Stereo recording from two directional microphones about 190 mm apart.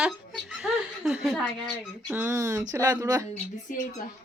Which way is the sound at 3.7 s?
45° left (ahead or behind).